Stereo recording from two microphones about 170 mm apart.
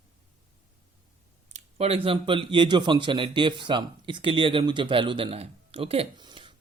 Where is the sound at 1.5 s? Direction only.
35° right (ahead or behind).